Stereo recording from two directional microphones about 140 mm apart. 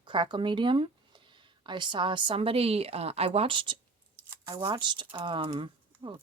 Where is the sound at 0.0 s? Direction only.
35° right (ahead or behind).